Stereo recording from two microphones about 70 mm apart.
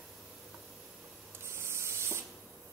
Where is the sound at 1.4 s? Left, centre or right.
Right.